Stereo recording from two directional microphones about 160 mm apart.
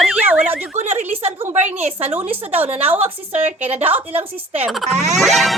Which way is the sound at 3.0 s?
40° right (ahead or behind).